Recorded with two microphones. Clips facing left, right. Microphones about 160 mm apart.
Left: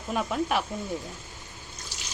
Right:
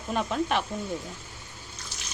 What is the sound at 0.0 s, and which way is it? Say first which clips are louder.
Speech: even; 5° left (ahead or behind).